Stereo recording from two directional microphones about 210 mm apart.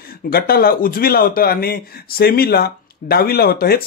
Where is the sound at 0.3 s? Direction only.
45° left (ahead or behind).